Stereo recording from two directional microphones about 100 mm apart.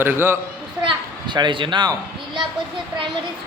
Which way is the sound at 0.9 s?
50° right (ahead or behind).